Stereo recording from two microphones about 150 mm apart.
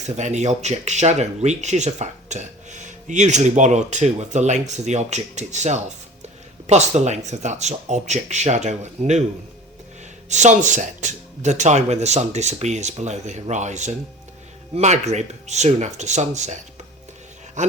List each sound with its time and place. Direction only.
0.2 s speech: 50° right (ahead or behind)
10.2 s speech: 50° right (ahead or behind)
17.6 s speech: 55° right (ahead or behind)